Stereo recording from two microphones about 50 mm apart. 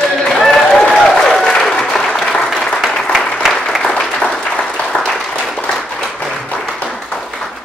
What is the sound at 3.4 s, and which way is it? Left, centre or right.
Applause, centre.